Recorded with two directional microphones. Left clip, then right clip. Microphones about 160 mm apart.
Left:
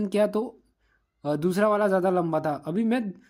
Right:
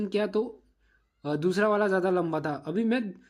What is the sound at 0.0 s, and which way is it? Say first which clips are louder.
A woman's voice: left 3 dB; 35° left (ahead or behind).